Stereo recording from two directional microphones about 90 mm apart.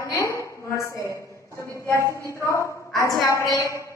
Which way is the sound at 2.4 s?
30° left (ahead or behind).